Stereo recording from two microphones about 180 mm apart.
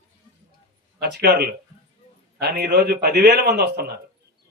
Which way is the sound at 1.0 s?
65° right (ahead or behind).